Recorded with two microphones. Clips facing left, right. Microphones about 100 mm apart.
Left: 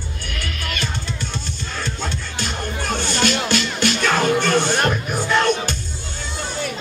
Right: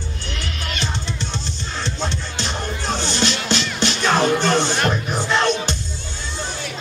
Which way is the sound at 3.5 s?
25° right (ahead or behind).